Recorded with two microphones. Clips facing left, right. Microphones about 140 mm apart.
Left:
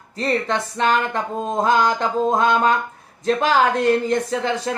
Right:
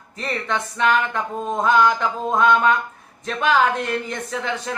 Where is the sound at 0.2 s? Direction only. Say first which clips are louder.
Left 4 dB; 35° left (ahead or behind).